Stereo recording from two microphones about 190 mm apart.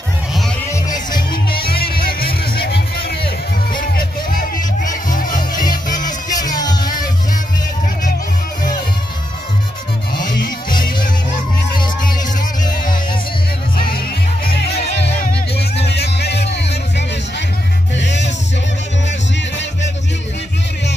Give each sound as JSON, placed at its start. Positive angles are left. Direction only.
{"t": 1.3, "sound": "music", "side_deg": 55}
{"t": 3.9, "sound": "music", "side_deg": 45}
{"t": 6.2, "sound": "music", "side_deg": 20}
{"t": 10.4, "sound": "music", "side_deg": 45}
{"t": 13.7, "sound": "music", "side_deg": 50}
{"t": 14.8, "sound": "music", "side_deg": 35}
{"t": 15.5, "sound": "music", "side_deg": 60}
{"t": 17.9, "sound": "music", "side_deg": 70}